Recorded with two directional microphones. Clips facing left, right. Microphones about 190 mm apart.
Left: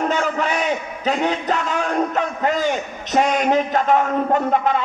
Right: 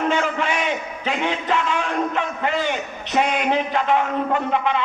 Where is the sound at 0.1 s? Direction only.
40° left (ahead or behind).